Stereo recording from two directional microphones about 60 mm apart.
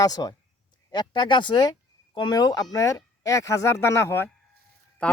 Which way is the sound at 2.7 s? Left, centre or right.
Left.